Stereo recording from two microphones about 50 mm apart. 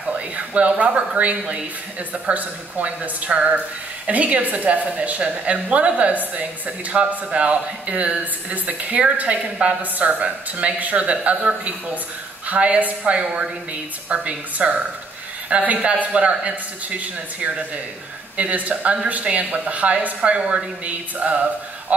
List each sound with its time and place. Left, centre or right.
0.6 s speech: right